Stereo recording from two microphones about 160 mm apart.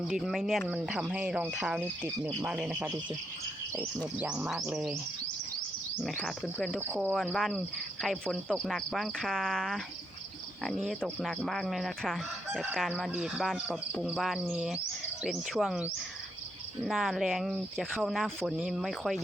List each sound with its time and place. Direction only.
0.1 s speech: centre (ahead or behind)
4.2 s speech: 10° right (ahead or behind)
6.0 s speech: centre (ahead or behind)
6.7 s speech: 10° right (ahead or behind)
7.1 s speech: centre (ahead or behind)